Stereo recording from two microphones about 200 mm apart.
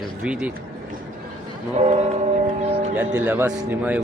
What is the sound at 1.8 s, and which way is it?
Speech, 30° right (ahead or behind).